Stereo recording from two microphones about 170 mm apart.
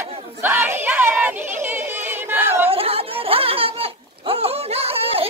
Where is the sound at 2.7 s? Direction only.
35° right (ahead or behind).